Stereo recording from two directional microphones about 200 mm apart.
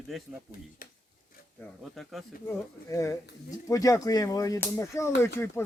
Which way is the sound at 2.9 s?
15° left (ahead or behind).